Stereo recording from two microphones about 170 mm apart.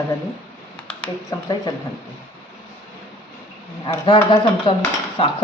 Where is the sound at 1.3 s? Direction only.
20° left (ahead or behind).